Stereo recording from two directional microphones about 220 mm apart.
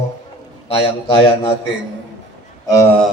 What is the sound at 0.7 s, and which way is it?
Speech, 25° left (ahead or behind).